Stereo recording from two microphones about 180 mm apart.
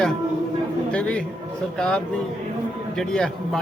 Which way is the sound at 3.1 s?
5° left (ahead or behind).